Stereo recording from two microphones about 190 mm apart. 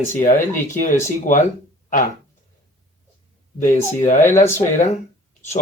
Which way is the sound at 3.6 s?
40° left (ahead or behind).